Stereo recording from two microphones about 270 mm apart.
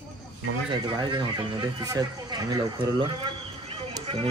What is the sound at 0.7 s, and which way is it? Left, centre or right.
Speech, centre.